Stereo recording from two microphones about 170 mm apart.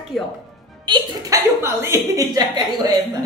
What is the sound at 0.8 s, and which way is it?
A woman's voice, 25° right (ahead or behind).